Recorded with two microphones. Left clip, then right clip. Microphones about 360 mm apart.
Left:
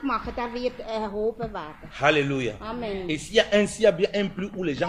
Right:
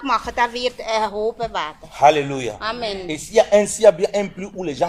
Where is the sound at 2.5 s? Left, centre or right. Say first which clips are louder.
Right 7 dB; right.